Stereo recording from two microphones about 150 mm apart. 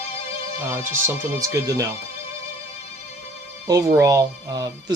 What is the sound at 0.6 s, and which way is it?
Music, 15° right (ahead or behind).